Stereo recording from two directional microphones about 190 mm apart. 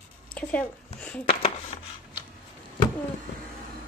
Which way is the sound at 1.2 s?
30° left (ahead or behind).